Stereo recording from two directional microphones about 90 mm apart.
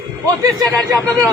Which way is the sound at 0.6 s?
45° right (ahead or behind).